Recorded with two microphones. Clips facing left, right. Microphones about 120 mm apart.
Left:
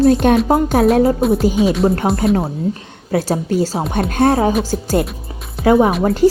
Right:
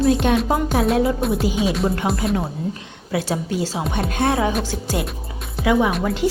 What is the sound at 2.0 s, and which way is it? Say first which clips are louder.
Music: left 5 dB; 40° left (ahead or behind).